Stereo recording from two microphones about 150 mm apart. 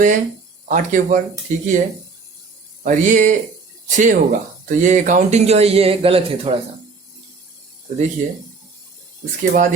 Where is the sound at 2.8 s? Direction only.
60° right (ahead or behind); by 6.6 s 40° right (ahead or behind).